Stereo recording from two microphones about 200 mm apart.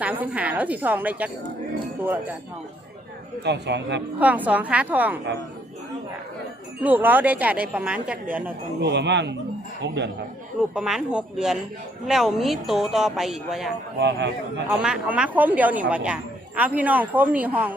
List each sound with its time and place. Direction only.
0.0 s speech: 10° right (ahead or behind)
3.4 s speech: 60° right (ahead or behind)
4.2 s speech: 5° right (ahead or behind)
6.8 s speech: 10° right (ahead or behind)
8.8 s speech: 60° right (ahead or behind)
10.8 s speech: 5° right (ahead or behind)
14.0 s speech: 60° right (ahead or behind)
14.7 s speech: 5° right (ahead or behind)